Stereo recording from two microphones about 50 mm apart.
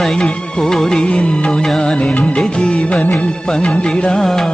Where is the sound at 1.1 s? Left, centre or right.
Left.